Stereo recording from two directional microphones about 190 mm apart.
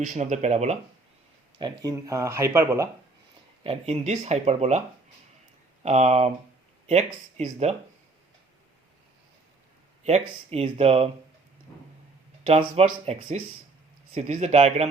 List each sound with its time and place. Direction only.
0.0 s speech: 35° right (ahead or behind)
1.5 s speech: 20° right (ahead or behind)
3.6 s speech: 30° right (ahead or behind)
5.8 s speech: 35° right (ahead or behind)
10.0 s speech: 35° right (ahead or behind)
12.5 s speech: 35° right (ahead or behind)